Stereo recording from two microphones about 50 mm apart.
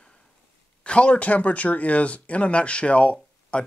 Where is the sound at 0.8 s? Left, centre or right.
Left.